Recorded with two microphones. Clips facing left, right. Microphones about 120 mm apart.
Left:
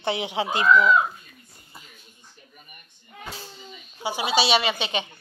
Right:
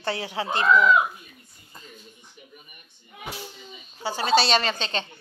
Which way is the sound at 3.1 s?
15° right (ahead or behind).